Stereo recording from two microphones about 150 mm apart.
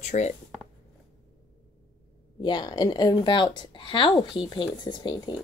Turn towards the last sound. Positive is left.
turn(degrees=25)  # may be behind; listen again after turning